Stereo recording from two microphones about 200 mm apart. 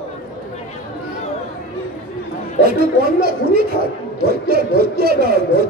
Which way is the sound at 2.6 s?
50° right (ahead or behind).